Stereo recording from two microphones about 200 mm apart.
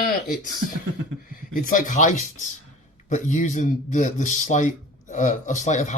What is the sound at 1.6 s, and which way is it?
Speech, 40° left (ahead or behind).